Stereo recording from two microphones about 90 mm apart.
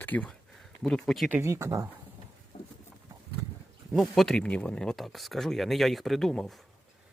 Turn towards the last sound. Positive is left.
turn(degrees=5)  # may be behind; listen again after turning